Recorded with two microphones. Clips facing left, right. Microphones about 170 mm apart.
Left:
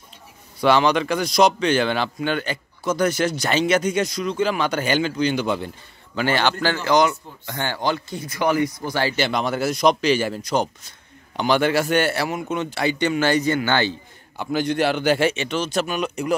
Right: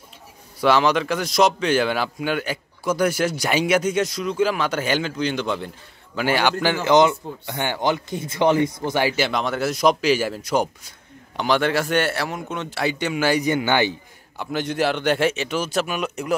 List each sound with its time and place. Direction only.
0.6 s a man's voice: 5° right (ahead or behind)
6.1 s speech: 10° right (ahead or behind)
9.1 s a man's voice: centre (ahead or behind)
11.3 s a man's voice: centre (ahead or behind); by 13.9 s 15° right (ahead or behind)
14.3 s a man's voice: centre (ahead or behind)